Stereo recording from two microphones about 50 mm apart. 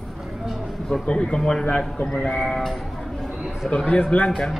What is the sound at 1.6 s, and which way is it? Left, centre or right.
Speech, left.